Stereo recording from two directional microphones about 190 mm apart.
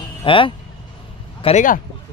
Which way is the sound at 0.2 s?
25° left (ahead or behind).